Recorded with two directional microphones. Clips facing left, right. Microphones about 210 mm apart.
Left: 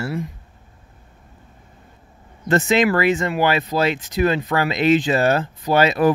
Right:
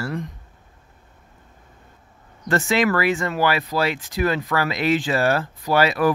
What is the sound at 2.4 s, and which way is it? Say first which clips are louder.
Speech: left 3 dB; 20° left (ahead or behind).